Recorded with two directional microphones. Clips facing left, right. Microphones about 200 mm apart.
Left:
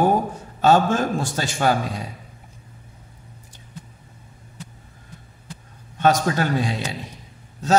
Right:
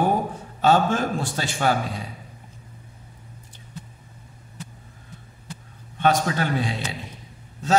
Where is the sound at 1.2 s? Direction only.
45° left (ahead or behind).